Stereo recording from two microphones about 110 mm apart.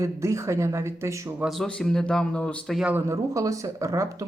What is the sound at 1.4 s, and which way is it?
A man's voice, centre (ahead or behind).